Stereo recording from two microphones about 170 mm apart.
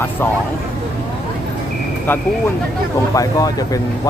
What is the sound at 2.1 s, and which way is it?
Speech, 10° left (ahead or behind).